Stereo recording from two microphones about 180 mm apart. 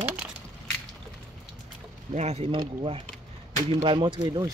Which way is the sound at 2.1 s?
35° right (ahead or behind).